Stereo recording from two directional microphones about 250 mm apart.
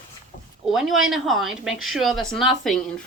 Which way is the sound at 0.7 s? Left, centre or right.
Centre.